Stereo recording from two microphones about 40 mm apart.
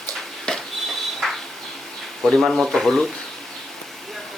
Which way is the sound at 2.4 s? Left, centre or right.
Centre.